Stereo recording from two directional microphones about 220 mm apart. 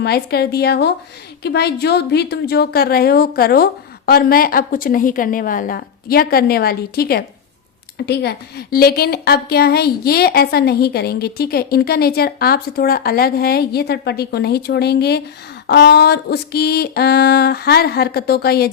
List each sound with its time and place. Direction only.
0.0 s a woman's voice: 45° left (ahead or behind)